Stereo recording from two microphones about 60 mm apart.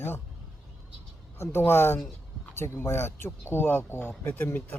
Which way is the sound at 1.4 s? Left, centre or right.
Left.